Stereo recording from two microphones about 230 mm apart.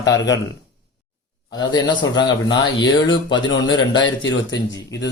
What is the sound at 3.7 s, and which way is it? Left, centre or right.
Speech, left.